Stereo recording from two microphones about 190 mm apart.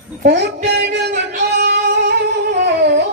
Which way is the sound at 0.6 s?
60° right (ahead or behind).